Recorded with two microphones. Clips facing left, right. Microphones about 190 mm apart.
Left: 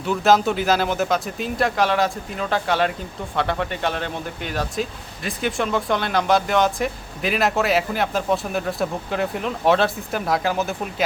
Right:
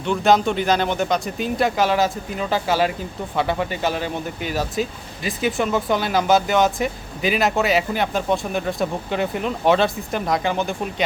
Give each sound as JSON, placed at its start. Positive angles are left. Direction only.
{"t": 0.0, "sound": "speech", "side_deg": 5}